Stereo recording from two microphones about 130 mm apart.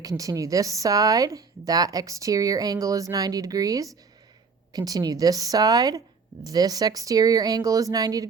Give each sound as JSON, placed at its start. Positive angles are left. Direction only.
{"t": 0.0, "sound": "speech", "side_deg": -25}